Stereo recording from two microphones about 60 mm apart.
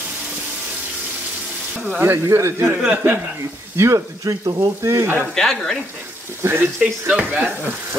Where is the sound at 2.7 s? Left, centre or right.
Right.